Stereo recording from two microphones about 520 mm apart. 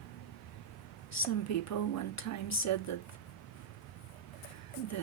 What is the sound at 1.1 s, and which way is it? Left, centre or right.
Speech, left.